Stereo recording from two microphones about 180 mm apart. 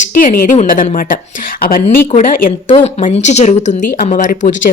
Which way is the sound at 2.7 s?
35° left (ahead or behind).